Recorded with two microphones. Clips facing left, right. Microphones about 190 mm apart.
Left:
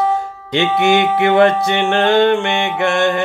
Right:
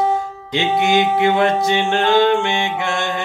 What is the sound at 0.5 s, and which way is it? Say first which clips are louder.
Music: left 2 dB; 60° left (ahead or behind).